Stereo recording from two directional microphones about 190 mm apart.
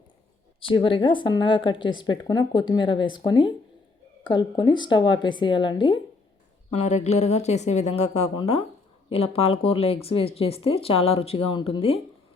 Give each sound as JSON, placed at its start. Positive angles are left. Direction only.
{"t": 0.6, "sound": "speech", "side_deg": 25}
{"t": 6.7, "sound": "speech", "side_deg": 35}